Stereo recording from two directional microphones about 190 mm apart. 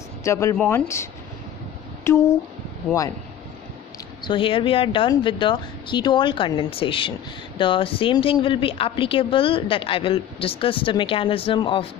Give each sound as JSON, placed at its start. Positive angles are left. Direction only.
{"t": 0.2, "sound": "speech", "side_deg": 15}
{"t": 2.0, "sound": "speech", "side_deg": 15}
{"t": 4.2, "sound": "speech", "side_deg": 25}